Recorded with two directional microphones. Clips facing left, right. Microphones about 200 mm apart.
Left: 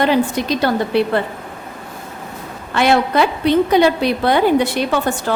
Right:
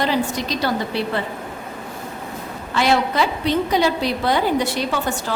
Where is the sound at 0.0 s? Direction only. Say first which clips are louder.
Left 5 dB; 60° left (ahead or behind).